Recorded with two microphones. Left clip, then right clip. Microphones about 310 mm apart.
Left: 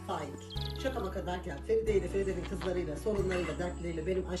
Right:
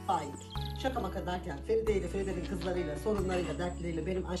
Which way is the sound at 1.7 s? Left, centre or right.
Right.